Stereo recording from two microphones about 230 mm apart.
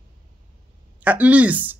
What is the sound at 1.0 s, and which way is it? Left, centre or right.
Speech, centre.